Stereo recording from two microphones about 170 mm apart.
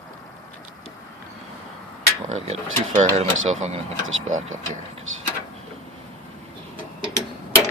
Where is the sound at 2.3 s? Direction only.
45° right (ahead or behind).